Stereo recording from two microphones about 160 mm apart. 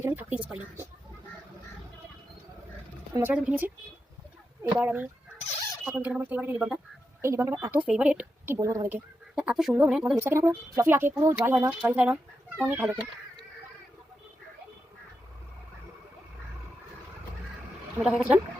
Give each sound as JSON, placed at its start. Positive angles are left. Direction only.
{"t": 0.0, "sound": "a woman's voice", "side_deg": -10}
{"t": 3.2, "sound": "a woman's voice", "side_deg": -10}
{"t": 4.8, "sound": "a woman's voice", "side_deg": -10}
{"t": 8.5, "sound": "speech", "side_deg": -20}
{"t": 9.3, "sound": "speech", "side_deg": -5}
{"t": 10.2, "sound": "a woman's voice", "side_deg": -15}
{"t": 18.0, "sound": "speech", "side_deg": -5}